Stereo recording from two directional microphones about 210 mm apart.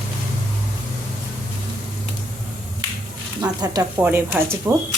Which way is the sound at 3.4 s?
15° right (ahead or behind).